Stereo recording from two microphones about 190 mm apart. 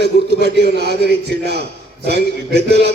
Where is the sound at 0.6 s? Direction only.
60° right (ahead or behind).